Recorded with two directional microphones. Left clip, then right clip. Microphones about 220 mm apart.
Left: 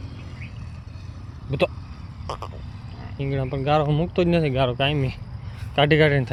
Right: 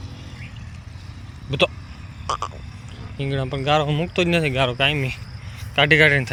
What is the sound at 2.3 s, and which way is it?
Frog, centre (ahead or behind).